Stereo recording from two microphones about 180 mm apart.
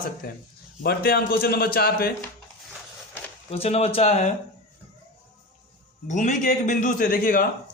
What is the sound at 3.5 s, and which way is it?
Speech, 35° left (ahead or behind).